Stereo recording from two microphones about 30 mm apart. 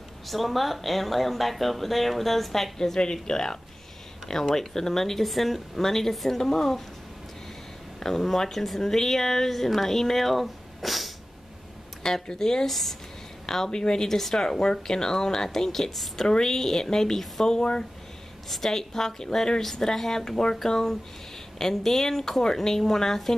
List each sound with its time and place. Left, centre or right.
0.3 s speech: centre
3.0 s speech: left
8.0 s speech: centre
12.0 s speech: centre
12.6 s speech: centre
13.7 s speech: left
14.0 s speech: centre
18.5 s speech: centre